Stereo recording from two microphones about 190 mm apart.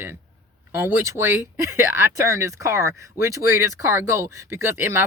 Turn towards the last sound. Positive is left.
turn(degrees=-10)  # may be behind; listen again after turning